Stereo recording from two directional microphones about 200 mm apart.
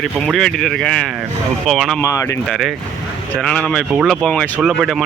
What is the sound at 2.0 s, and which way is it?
Speech, 15° left (ahead or behind).